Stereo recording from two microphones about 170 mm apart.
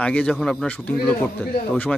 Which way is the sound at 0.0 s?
5° left (ahead or behind).